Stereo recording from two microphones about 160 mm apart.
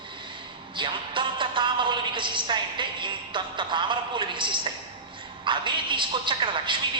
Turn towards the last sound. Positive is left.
turn(degrees=-30)  # may be behind; listen again after turning